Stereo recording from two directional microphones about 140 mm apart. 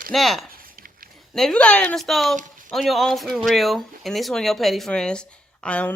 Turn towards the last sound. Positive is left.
turn(degrees=10)  # may be behind; listen again after turning